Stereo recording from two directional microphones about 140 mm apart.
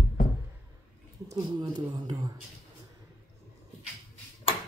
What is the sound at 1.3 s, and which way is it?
Speech, 30° right (ahead or behind).